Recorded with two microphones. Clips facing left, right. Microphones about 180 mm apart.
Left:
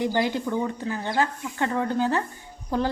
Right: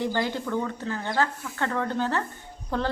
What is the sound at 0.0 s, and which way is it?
A woman's voice, 15° left (ahead or behind).